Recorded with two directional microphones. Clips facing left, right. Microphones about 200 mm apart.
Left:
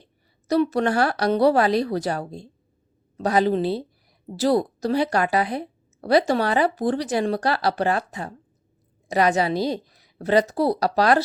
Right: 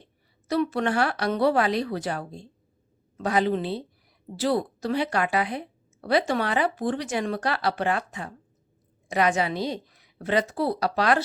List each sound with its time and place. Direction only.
0.0 s a woman's voice: 40° left (ahead or behind)